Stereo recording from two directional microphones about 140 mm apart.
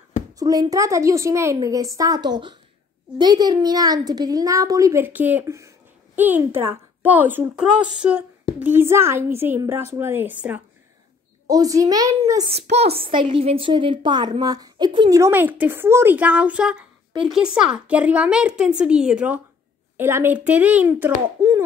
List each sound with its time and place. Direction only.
0.3 s a child's voice: 25° right (ahead or behind)
11.4 s a child's voice: 25° right (ahead or behind)
12.5 s a woman's voice: 45° right (ahead or behind); by 15.1 s 30° right (ahead or behind)
15.1 s speech: 15° right (ahead or behind)
21.4 s a sound: 25° right (ahead or behind)